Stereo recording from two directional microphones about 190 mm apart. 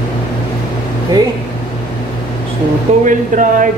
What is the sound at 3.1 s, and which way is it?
Speech, 40° right (ahead or behind).